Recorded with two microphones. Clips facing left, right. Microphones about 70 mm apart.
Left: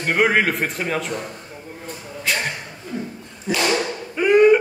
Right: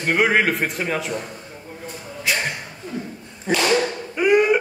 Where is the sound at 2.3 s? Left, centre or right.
Centre.